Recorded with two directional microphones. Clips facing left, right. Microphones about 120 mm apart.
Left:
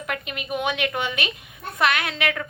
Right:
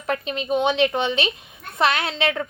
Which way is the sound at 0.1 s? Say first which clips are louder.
Right 7 dB; 30° right (ahead or behind).